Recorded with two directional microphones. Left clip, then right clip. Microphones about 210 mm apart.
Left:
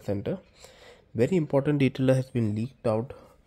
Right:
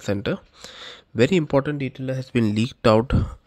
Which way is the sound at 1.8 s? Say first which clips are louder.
Left 5 dB; 20° left (ahead or behind).